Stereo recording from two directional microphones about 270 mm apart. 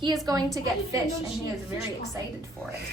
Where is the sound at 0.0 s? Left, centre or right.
Centre.